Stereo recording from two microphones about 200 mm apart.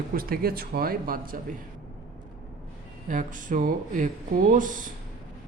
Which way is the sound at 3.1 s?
40° right (ahead or behind).